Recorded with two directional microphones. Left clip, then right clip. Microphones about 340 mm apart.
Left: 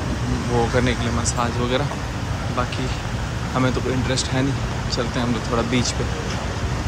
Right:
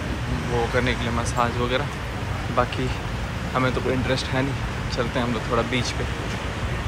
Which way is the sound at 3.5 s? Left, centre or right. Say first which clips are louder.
Left 1 dB; centre.